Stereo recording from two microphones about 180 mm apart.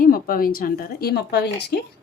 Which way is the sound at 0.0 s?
55° left (ahead or behind).